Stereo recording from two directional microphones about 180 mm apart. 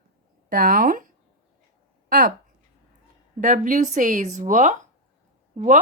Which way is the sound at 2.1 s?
50° right (ahead or behind).